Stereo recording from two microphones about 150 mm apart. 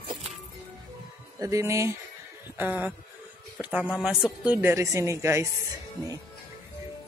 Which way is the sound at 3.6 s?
10° right (ahead or behind).